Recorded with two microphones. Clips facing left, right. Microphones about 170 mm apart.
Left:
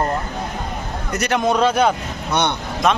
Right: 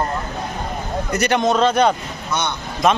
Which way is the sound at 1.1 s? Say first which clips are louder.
Right 1 dB; centre (ahead or behind).